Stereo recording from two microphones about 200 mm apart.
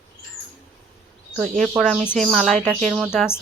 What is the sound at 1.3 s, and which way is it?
Speech, centre (ahead or behind).